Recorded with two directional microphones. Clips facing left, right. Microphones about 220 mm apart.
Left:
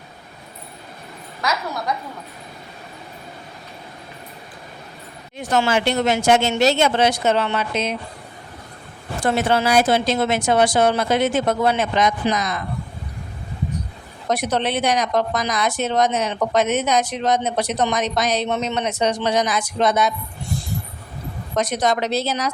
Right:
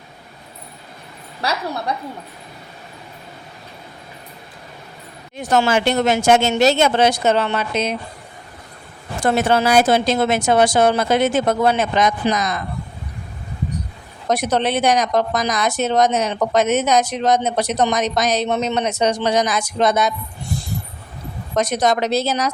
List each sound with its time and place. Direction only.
1.4 s a woman's voice: 30° right (ahead or behind)
5.5 s a woman's voice: 45° right (ahead or behind)
9.2 s a woman's voice: 45° right (ahead or behind)
14.3 s a woman's voice: 45° right (ahead or behind)
21.6 s a woman's voice: 45° right (ahead or behind)